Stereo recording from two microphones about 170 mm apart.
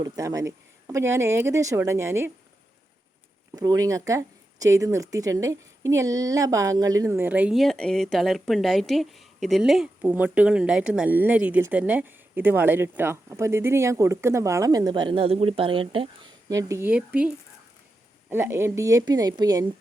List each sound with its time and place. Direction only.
0.0 s speech: 20° right (ahead or behind)
3.5 s a woman's voice: 20° right (ahead or behind)